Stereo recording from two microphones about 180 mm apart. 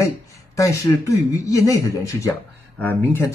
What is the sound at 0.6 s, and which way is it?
Speech, 20° left (ahead or behind).